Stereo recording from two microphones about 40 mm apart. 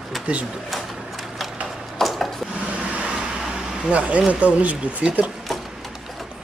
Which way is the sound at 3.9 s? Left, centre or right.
Right.